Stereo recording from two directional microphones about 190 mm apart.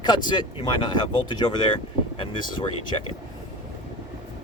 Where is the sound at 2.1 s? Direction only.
30° left (ahead or behind).